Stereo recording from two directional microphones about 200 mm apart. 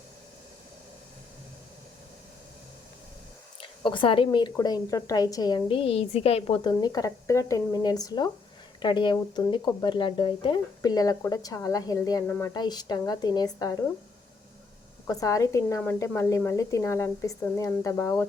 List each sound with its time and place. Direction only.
3.6 s speech: 25° left (ahead or behind)
15.0 s a woman's voice: 15° left (ahead or behind)